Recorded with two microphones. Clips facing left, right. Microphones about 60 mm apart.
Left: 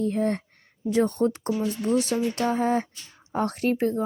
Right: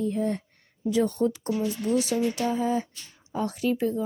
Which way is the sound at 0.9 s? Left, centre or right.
Left.